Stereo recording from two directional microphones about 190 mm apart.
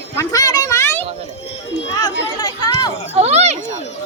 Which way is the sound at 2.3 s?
20° left (ahead or behind).